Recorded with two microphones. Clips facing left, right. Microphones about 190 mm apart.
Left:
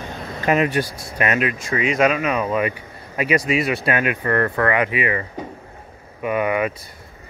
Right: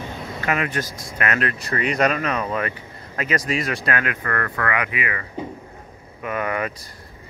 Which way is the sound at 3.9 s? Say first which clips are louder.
Left 5 dB; 20° left (ahead or behind).